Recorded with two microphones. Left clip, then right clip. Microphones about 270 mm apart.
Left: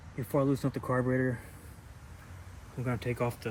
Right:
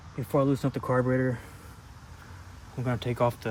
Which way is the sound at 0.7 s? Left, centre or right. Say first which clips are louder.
Right 4 dB; right.